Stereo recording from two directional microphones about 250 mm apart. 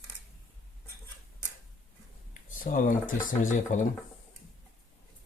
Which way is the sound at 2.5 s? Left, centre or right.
Left.